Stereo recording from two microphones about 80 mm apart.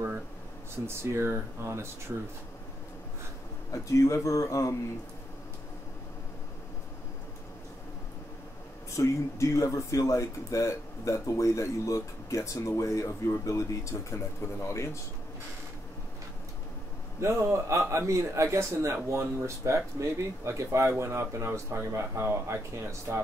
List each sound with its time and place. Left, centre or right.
0.8 s a man's voice: right
3.7 s speech: left
8.9 s speech: left
17.2 s a man's voice: right